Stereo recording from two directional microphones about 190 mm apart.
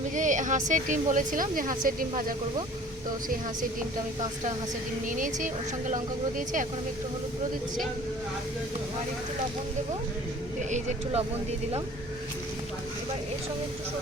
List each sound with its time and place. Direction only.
0.1 s speech: 40° right (ahead or behind)
5.0 s speech: 45° right (ahead or behind)
10.7 s speech: 40° right (ahead or behind)